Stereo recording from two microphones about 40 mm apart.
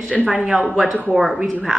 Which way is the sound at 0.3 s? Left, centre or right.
Centre.